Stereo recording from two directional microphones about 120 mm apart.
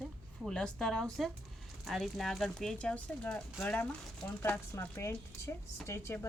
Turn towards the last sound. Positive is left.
turn(degrees=20)  # may be behind; listen again after turning